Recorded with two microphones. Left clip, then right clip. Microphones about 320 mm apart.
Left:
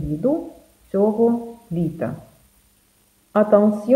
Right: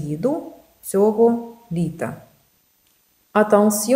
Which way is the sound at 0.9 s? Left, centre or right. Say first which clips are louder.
Right 2 dB; right.